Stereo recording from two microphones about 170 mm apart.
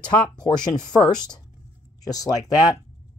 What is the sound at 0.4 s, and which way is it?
Speech, 25° left (ahead or behind).